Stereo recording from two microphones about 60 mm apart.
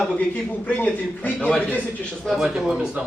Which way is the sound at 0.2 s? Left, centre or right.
Left.